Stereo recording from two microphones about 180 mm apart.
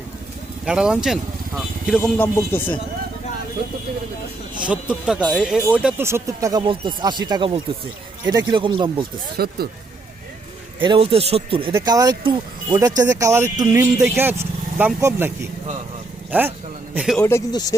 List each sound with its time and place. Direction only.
0.6 s speech: 5° right (ahead or behind)
2.0 s speech: 10° left (ahead or behind)
4.6 s speech: 5° right (ahead or behind); by 9.0 s 30° right (ahead or behind)
9.4 s speech: 60° right (ahead or behind)
10.8 s a man's voice: 30° right (ahead or behind)
11.7 s a man's voice: 20° right (ahead or behind)
17.2 s speech: 15° left (ahead or behind)